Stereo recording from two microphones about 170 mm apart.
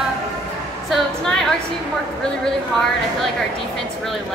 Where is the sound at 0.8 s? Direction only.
5° left (ahead or behind).